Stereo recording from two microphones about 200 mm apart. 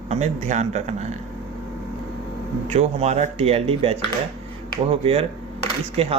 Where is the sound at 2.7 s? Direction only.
35° right (ahead or behind).